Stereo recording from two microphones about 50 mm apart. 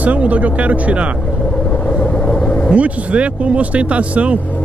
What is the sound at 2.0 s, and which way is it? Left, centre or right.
Vehicle, left.